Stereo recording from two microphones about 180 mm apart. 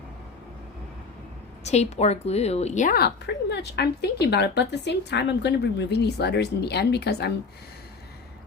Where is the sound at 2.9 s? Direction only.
65° left (ahead or behind).